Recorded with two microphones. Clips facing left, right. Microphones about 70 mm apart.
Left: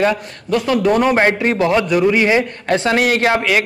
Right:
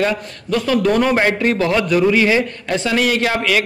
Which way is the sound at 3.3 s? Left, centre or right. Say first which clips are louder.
Left 2 dB; left.